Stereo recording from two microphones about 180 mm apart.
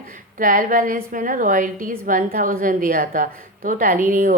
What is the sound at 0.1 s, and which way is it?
A woman's voice, 45° right (ahead or behind).